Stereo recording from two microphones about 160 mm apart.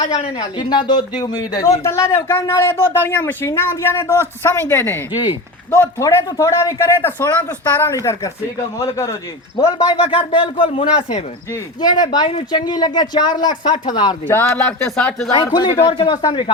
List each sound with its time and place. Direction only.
0.0 s speech: 40° left (ahead or behind)
0.3 s speech: 25° left (ahead or behind)
9.6 s speech: 25° left (ahead or behind)
14.3 s speech: 10° left (ahead or behind)
15.4 s speech: 25° left (ahead or behind)